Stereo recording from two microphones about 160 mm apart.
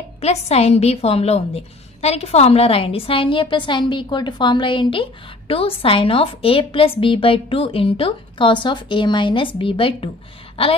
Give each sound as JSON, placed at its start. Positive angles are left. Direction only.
{"t": 0.2, "sound": "a woman's voice", "side_deg": 40}